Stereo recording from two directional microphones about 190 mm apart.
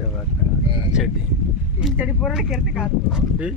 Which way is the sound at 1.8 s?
5° right (ahead or behind).